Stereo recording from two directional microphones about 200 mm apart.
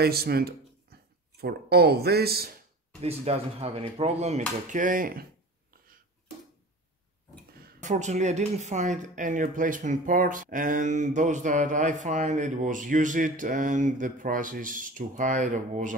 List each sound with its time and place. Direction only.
0.0 s speech: 50° right (ahead or behind)
3.0 s speech: 30° right (ahead or behind)
7.6 s speech: 40° right (ahead or behind)